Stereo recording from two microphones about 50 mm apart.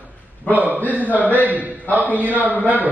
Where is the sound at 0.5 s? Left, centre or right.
Right.